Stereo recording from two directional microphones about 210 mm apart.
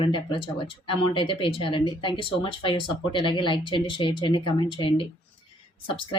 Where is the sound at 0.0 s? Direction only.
25° left (ahead or behind).